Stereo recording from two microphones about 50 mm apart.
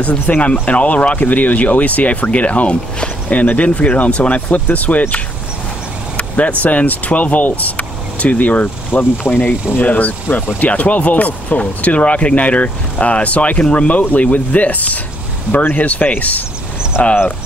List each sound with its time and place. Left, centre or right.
0.0 s speech: left
6.1 s speech: left